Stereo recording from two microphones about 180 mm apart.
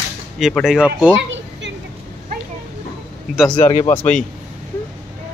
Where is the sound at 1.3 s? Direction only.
80° right.